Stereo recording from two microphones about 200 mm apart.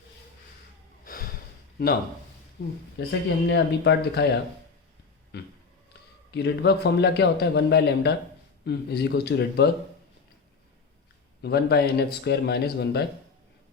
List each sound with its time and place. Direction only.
1.0 s snort: 45° left (ahead or behind)
2.6 s a man's voice: 60° left (ahead or behind)
11.4 s speech: 55° left (ahead or behind)